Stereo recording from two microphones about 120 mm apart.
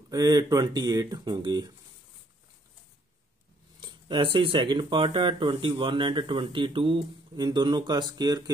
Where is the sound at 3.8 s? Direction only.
45° right (ahead or behind).